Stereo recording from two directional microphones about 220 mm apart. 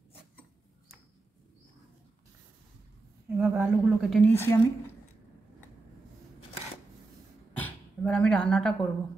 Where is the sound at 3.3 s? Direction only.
5° right (ahead or behind); by 4.5 s 10° left (ahead or behind).